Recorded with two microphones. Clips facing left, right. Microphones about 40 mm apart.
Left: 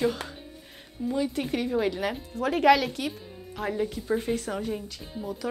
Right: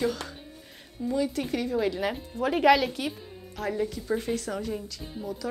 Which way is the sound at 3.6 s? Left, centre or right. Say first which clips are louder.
Even; centre.